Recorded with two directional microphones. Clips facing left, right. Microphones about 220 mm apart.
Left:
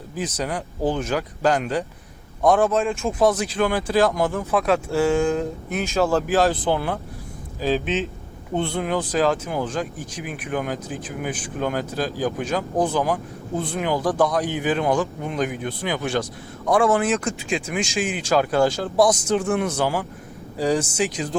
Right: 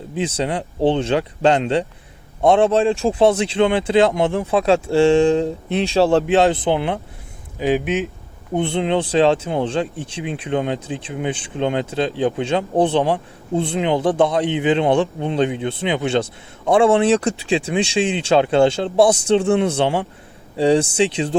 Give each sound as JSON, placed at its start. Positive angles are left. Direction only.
{"t": 0.1, "sound": "speech", "side_deg": -25}